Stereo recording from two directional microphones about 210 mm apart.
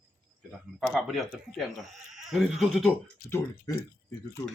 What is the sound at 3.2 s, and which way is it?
Speech, 45° left (ahead or behind).